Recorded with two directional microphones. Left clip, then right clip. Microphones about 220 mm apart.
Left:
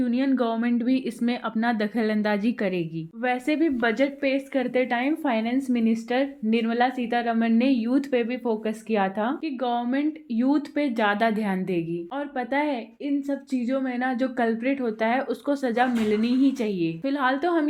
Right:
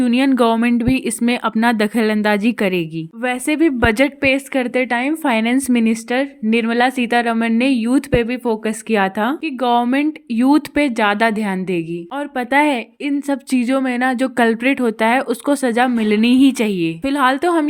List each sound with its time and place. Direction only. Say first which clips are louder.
0.0 s a woman's voice: right 10 dB; 40° right (ahead or behind)